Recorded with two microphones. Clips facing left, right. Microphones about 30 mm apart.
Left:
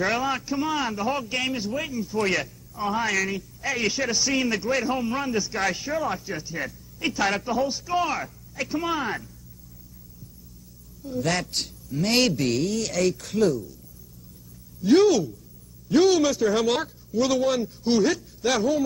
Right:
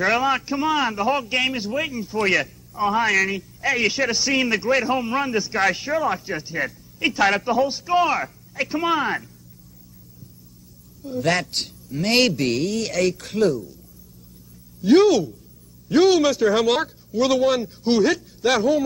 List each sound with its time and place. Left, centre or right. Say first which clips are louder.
0.0 s a man's voice: right 5 dB; centre
7.6 s a man's voice: right 5 dB; right
11.1 s a man's voice: right 4 dB; centre
14.8 s a man's voice: right 3 dB; centre